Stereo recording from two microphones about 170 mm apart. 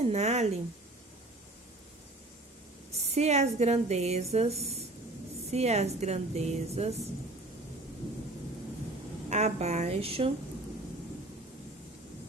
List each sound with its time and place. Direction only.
0.0 s a woman's voice: 40° right (ahead or behind)
3.0 s a woman's voice: 40° right (ahead or behind)
9.3 s a woman's voice: 40° right (ahead or behind)